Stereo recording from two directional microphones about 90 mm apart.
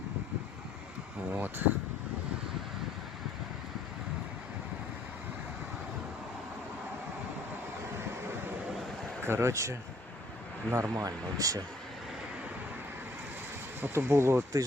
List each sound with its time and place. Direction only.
1.3 s speech: 20° right (ahead or behind)
9.2 s speech: 30° right (ahead or behind)
13.8 s speech: 30° right (ahead or behind)